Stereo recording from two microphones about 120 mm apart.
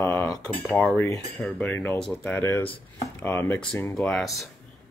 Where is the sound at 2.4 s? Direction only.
20° left (ahead or behind).